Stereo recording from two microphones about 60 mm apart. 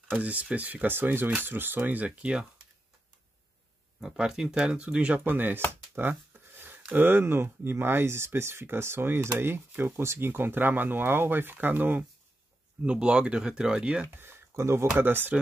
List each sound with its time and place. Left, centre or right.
0.1 s speech: right
4.0 s speech: centre
5.2 s speech: right
5.9 s a sound: right
6.9 s speech: right
12.8 s speech: centre
14.1 s speech: right
15.0 s speech: right